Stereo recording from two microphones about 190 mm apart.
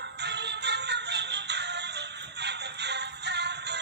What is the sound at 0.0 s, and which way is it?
Music, 65° right (ahead or behind).